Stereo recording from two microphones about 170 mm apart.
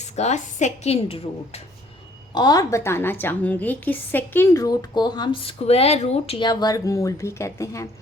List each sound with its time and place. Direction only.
0.0 s a woman's voice: 40° left (ahead or behind)
2.3 s a woman's voice: 25° left (ahead or behind)